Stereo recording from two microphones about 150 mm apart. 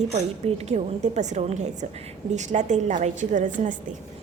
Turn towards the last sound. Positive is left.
turn(degrees=-60)  # may be behind; listen again after turning